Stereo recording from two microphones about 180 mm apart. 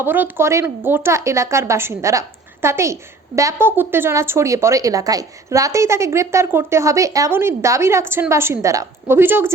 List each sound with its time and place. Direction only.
0.0 s a woman's voice: 10° right (ahead or behind)